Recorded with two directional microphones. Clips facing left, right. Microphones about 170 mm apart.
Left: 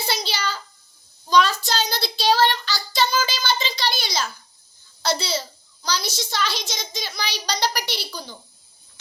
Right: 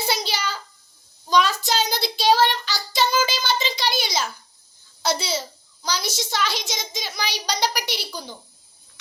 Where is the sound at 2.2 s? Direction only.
15° right (ahead or behind).